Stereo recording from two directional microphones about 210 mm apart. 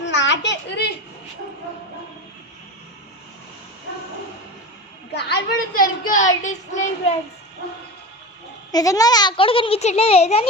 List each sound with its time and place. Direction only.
0.0 s a sound: 60° left (ahead or behind)
5.1 s a woman's voice: 45° left (ahead or behind)
8.7 s a child's voice: 15° left (ahead or behind)